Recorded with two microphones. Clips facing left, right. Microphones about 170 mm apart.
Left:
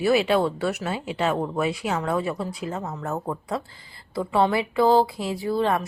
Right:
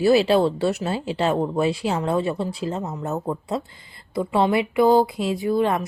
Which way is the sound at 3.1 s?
5° right (ahead or behind).